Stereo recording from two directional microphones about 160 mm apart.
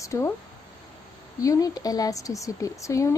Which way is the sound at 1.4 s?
20° left (ahead or behind).